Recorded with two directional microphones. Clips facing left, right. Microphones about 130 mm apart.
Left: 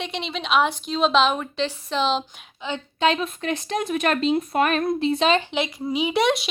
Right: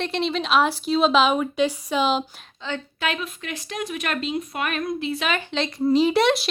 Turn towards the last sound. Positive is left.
turn(degrees=0)  # may be behind; listen again after turning